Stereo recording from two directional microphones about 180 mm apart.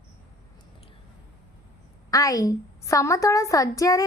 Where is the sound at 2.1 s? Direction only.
20° left (ahead or behind).